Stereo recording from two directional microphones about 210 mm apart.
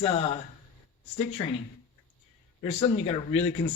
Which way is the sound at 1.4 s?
25° left (ahead or behind).